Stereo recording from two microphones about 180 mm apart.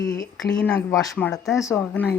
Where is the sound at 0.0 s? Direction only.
50° left (ahead or behind).